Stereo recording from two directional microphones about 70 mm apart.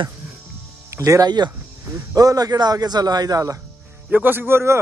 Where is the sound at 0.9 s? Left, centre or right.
Right.